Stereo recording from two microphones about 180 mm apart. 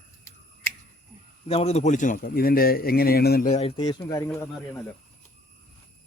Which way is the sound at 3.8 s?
15° left (ahead or behind).